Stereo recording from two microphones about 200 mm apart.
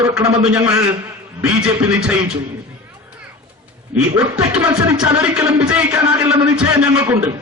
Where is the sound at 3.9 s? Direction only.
15° right (ahead or behind).